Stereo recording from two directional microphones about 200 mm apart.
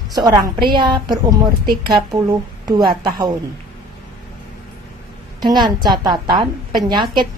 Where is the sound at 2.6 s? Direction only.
20° right (ahead or behind).